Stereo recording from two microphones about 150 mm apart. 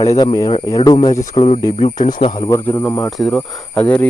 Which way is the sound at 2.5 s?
20° left (ahead or behind).